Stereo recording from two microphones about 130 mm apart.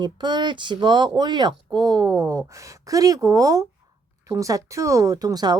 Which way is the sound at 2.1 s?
20° right (ahead or behind).